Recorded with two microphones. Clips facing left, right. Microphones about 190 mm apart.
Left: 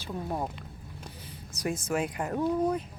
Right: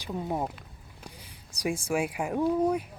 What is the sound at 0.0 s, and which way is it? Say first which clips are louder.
Speech: right 2 dB; 20° right (ahead or behind).